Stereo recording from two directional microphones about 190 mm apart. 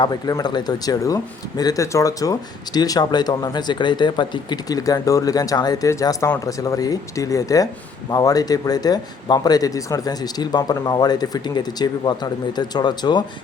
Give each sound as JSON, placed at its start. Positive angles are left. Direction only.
{"t": 0.0, "sound": "speech", "side_deg": 20}